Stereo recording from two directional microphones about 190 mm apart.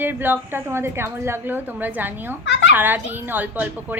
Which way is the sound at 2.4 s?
70° left (ahead or behind).